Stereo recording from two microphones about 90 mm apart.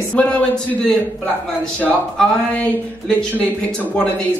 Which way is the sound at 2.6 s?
10° left (ahead or behind).